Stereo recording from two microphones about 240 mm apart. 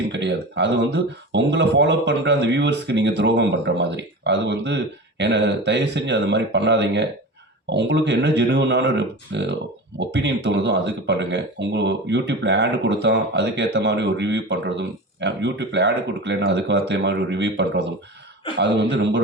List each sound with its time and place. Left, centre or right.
0.1 s speech: right